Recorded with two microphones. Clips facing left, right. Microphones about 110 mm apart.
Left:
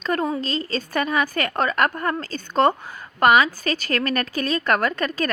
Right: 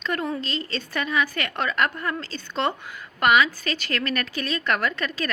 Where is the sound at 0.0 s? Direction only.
40° left (ahead or behind).